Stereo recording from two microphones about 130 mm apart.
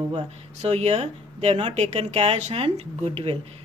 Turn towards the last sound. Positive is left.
turn(degrees=-50)  # may be behind; listen again after turning